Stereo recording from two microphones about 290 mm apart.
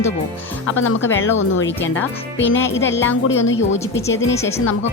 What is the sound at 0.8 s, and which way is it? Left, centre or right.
Speech, left.